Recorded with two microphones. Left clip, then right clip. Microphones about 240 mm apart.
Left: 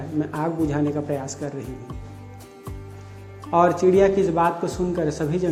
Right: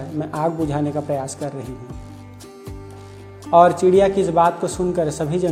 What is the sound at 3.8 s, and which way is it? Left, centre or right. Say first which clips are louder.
Speech: right 3 dB; right.